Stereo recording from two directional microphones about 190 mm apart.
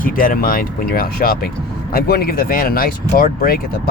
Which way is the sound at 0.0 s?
45° left (ahead or behind).